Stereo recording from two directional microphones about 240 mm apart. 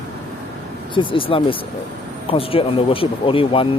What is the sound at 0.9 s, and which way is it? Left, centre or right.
Speech, left.